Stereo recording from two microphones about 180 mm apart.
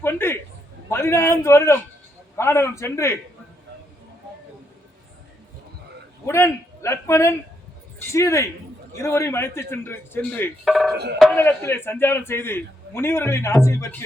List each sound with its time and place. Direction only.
0.0 s a man's voice: 15° left (ahead or behind)
6.2 s a man's voice: 15° left (ahead or behind); by 10.9 s centre (ahead or behind)
11.3 s a man's voice: 10° left (ahead or behind)